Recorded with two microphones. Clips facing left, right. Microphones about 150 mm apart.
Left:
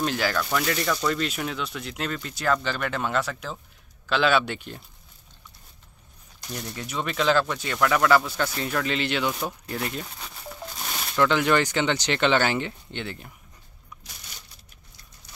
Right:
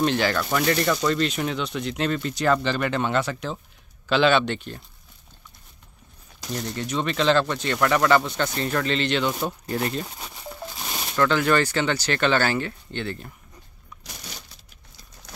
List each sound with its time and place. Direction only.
0.0 s speech: 5° left (ahead or behind)
6.7 s speech: 5° left (ahead or behind)
9.4 s speech: 5° right (ahead or behind)
10.3 s a sound: 5° right (ahead or behind)
11.1 s speech: 15° left (ahead or behind)